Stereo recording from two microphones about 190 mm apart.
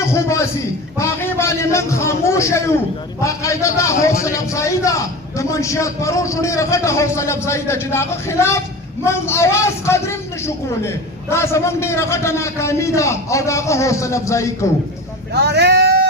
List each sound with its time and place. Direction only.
0.1 s a sound: 15° left (ahead or behind)
0.9 s a man's voice: 15° left (ahead or behind)
15.3 s vehicle: 60° right (ahead or behind)